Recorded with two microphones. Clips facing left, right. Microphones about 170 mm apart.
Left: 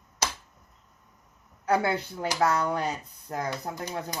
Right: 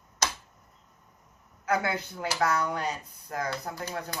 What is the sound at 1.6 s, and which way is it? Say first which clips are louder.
Speech: left 3 dB; 30° left (ahead or behind).